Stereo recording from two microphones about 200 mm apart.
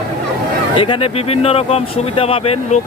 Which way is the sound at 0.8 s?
25° left (ahead or behind).